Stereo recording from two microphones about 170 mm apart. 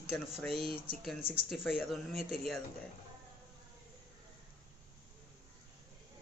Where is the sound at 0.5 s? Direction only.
35° right (ahead or behind).